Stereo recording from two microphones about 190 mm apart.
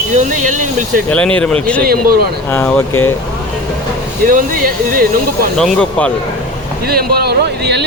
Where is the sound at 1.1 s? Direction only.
5° left (ahead or behind).